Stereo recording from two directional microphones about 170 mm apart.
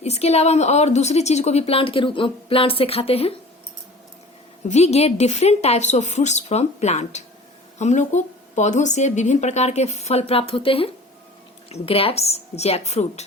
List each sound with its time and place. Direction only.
0.0 s a woman's voice: 40° left (ahead or behind)
4.7 s a woman's voice: 40° left (ahead or behind)